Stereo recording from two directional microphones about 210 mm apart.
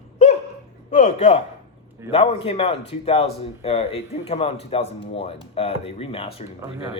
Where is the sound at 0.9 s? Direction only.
30° left (ahead or behind).